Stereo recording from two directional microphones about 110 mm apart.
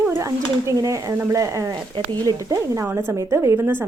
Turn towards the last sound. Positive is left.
turn(degrees=-20)  # may be behind; listen again after turning